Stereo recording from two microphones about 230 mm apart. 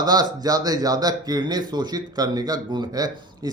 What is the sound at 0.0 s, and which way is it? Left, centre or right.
Speech, centre.